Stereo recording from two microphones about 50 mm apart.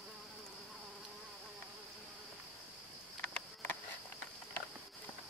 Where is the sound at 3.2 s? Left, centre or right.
Left.